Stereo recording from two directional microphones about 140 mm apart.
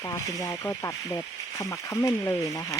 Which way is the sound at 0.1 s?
25° left (ahead or behind).